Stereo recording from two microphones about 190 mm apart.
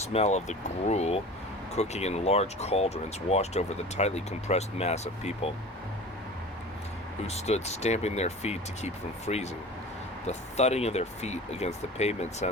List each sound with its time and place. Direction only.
0.1 s speech: 35° left (ahead or behind)
7.3 s speech: 35° left (ahead or behind)